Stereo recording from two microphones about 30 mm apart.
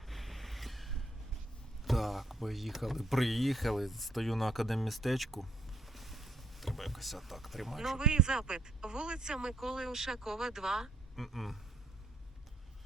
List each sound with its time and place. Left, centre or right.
0.1 s vehicle: centre
1.8 s speech: centre
5.9 s a sound: centre
7.9 s a man's voice: right
9.6 s speech: centre
11.2 s speech: centre